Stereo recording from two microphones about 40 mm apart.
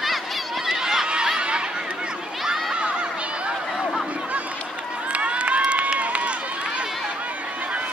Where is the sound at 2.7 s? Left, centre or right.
Right.